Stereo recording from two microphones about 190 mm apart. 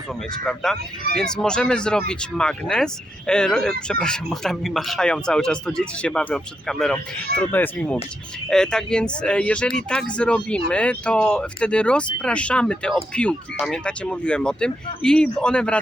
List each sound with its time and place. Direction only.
0.4 s speech: centre (ahead or behind)